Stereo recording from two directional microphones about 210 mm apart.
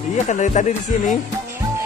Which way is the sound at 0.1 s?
35° left (ahead or behind).